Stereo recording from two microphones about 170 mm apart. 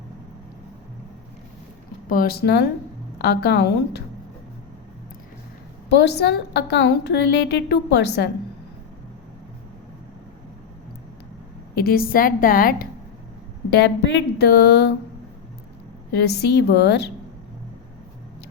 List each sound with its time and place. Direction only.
2.0 s a woman's voice: 60° left (ahead or behind); by 4.0 s 80° left
5.9 s a woman's voice: 80° left
11.8 s a woman's voice: 60° left (ahead or behind)
13.7 s a woman's voice: 75° left (ahead or behind)
16.2 s a woman's voice: 75° left (ahead or behind)